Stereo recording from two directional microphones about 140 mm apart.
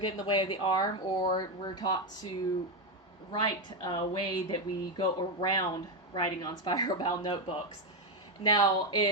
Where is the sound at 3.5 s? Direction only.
30° left (ahead or behind).